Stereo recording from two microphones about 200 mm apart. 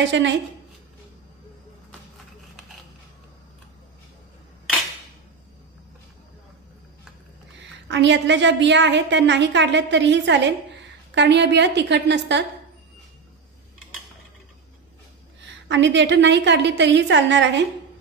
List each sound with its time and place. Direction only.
0.0 s a woman's voice: 65° right (ahead or behind)
7.6 s a woman's voice: 65° right (ahead or behind)
15.4 s a woman's voice: 65° right (ahead or behind)